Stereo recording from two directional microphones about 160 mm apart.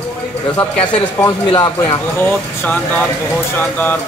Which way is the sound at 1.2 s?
25° left (ahead or behind).